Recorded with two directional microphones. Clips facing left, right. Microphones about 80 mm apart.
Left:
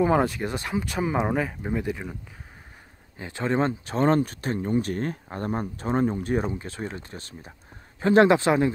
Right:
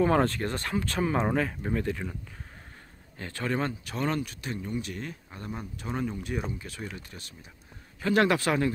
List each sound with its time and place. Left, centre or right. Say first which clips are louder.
0.0 s speech: left 2 dB; centre
3.2 s speech: left 5 dB; centre